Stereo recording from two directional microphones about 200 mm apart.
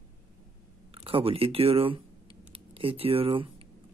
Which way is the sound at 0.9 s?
30° right (ahead or behind).